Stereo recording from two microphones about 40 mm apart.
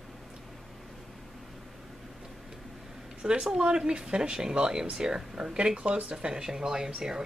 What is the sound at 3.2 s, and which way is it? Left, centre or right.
Speech, centre.